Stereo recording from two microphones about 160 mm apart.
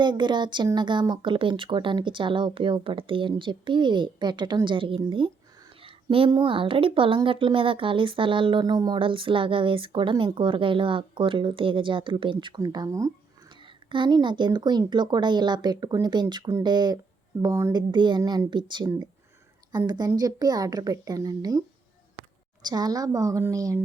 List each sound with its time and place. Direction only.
0.0 s a woman's voice: 30° right (ahead or behind)
19.9 s speech: 25° right (ahead or behind)
22.6 s speech: 25° right (ahead or behind)